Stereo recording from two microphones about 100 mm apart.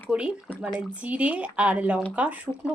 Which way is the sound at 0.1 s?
10° right (ahead or behind).